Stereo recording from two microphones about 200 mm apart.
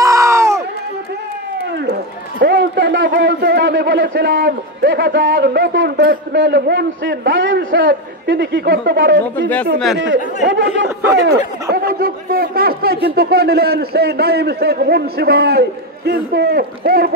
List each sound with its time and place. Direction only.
0.0 s a sound: 15° right (ahead or behind)
2.4 s a man's voice: 55° right (ahead or behind)
11.7 s a man's voice: 50° right (ahead or behind)